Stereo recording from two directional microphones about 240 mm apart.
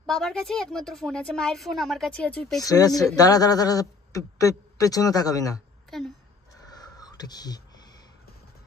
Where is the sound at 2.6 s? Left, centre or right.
Centre.